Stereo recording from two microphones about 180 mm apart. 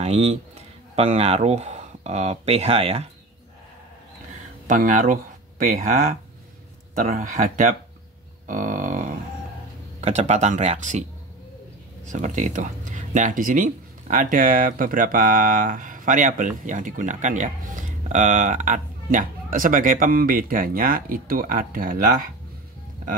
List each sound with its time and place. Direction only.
0.0 s speech: 35° right (ahead or behind)
4.6 s speech: 45° right (ahead or behind)
7.0 s speech: 40° right (ahead or behind)
8.5 s a sound: 45° right (ahead or behind)
9.9 s speech: 40° right (ahead or behind)
12.1 s speech: 40° right (ahead or behind)